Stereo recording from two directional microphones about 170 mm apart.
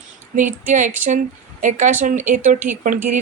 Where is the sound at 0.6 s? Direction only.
50° right (ahead or behind).